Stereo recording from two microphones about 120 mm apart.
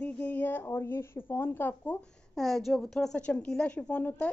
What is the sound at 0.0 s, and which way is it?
Speech, 15° left (ahead or behind).